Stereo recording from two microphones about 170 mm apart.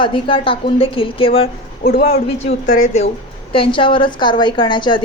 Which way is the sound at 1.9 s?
60° left (ahead or behind).